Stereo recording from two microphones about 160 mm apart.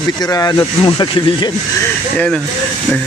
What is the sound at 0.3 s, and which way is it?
Speech, 20° left (ahead or behind).